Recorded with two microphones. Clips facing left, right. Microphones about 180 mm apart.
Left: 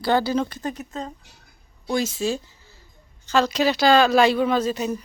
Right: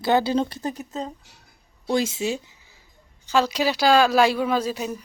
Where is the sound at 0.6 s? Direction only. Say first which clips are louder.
Right 1 dB; 5° right (ahead or behind).